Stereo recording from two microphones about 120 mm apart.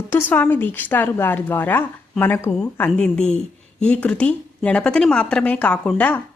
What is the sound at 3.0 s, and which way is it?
Speech, 5° left (ahead or behind).